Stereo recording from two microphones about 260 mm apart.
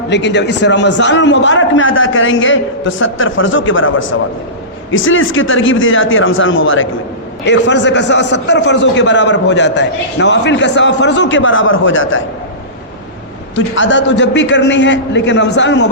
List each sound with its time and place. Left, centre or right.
0.1 s a man's voice: left
13.7 s a man's voice: left